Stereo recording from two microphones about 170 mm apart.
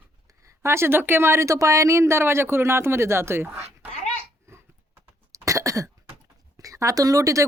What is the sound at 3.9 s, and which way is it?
Dog, 40° left (ahead or behind).